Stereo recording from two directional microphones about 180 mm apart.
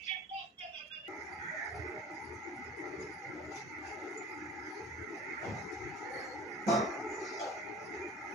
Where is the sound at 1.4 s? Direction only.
Centre (ahead or behind).